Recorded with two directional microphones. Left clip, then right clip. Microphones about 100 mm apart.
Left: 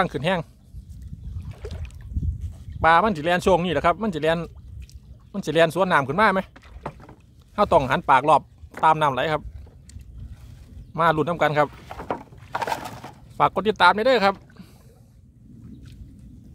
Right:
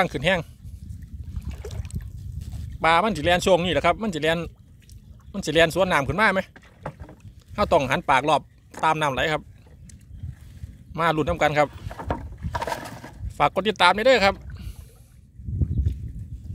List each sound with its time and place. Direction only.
0.0 s speech: 15° left (ahead or behind)
2.8 s speech: 15° left (ahead or behind)
7.5 s a man's voice: 25° left (ahead or behind)
10.9 s speech: 25° left (ahead or behind)
13.4 s speech: 20° left (ahead or behind)
14.6 s rowboat: 30° left (ahead or behind)